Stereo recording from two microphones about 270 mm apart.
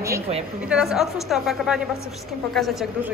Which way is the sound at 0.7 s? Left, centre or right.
Centre.